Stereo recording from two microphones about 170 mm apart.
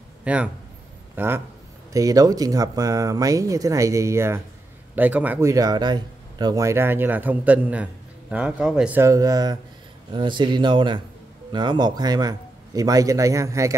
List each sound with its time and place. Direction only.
0.2 s a man's voice: 5° right (ahead or behind)